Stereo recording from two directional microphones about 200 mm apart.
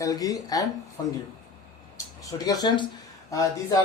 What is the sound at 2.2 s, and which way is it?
Speech, 20° left (ahead or behind).